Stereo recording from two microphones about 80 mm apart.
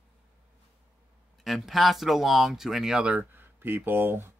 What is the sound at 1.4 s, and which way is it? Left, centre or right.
Speech, centre.